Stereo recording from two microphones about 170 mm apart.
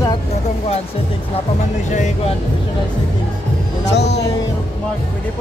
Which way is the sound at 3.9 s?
80° left.